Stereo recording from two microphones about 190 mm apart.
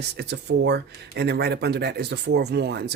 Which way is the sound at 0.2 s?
60° right (ahead or behind).